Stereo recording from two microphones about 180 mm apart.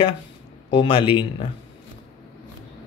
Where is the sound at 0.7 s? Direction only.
30° left (ahead or behind).